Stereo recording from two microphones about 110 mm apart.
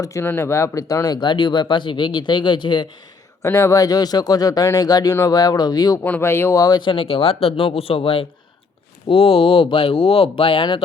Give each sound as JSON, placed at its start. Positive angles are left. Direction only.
{"t": 0.0, "sound": "speech", "side_deg": 30}
{"t": 3.4, "sound": "speech", "side_deg": 25}
{"t": 6.1, "sound": "speech", "side_deg": 20}
{"t": 6.6, "sound": "speech", "side_deg": 40}